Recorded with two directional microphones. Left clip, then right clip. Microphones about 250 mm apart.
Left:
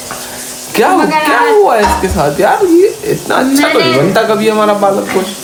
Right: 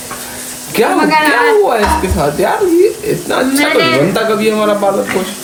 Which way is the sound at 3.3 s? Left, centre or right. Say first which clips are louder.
Left 2 dB; left.